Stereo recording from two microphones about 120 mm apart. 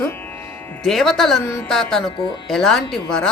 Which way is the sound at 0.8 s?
Centre (ahead or behind).